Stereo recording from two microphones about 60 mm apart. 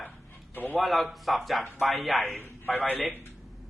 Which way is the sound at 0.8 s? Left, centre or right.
Centre.